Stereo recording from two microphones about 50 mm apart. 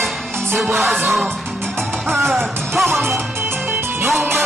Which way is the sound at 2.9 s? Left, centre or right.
Right.